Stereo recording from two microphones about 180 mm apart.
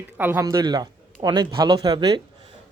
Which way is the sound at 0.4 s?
20° right (ahead or behind).